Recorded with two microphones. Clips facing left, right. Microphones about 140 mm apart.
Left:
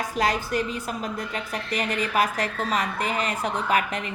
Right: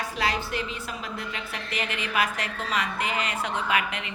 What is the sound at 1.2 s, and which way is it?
A woman's voice, 40° left (ahead or behind).